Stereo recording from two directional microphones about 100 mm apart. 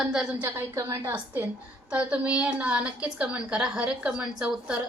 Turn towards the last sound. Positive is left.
turn(degrees=-10)  # may be behind; listen again after turning